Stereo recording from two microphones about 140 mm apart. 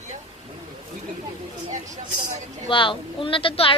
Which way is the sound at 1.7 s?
60° right (ahead or behind).